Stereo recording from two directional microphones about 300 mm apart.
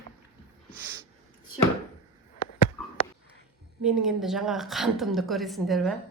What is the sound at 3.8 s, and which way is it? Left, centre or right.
A woman's voice, centre.